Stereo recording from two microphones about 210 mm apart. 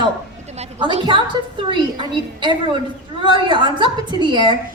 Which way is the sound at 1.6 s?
20° right (ahead or behind).